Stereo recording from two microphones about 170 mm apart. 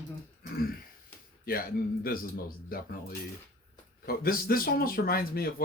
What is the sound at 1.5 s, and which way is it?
Speech, 60° left (ahead or behind).